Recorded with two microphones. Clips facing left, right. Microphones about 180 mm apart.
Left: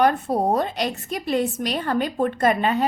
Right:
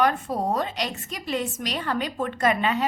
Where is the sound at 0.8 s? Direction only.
60° left (ahead or behind).